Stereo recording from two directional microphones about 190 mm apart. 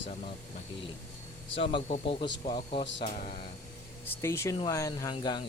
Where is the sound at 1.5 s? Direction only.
30° left (ahead or behind).